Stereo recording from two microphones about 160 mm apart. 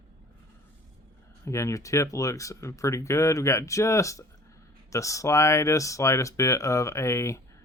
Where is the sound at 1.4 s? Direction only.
20° left (ahead or behind).